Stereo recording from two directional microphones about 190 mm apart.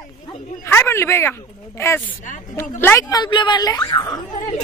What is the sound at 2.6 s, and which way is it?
Speech, 10° left (ahead or behind).